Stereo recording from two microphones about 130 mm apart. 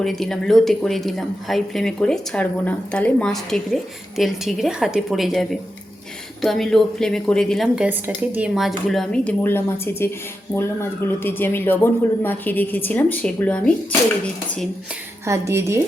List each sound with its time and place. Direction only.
0.0 s speech: centre (ahead or behind)
7.8 s speech: 15° right (ahead or behind); by 13.7 s 10° left (ahead or behind)
15.3 s speech: 20° right (ahead or behind)